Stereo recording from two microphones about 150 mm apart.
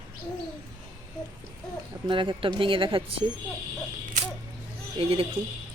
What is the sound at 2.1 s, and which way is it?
Speech, 35° right (ahead or behind).